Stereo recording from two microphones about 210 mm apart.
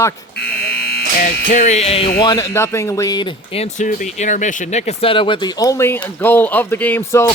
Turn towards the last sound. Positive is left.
turn(degrees=10)  # may be behind; listen again after turning